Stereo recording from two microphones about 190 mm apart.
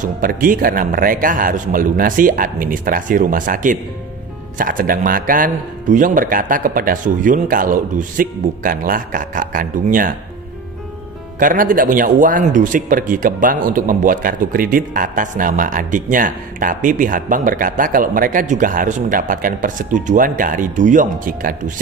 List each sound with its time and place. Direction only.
0.0 s speech: 45° right (ahead or behind)
11.3 s speech: 45° right (ahead or behind)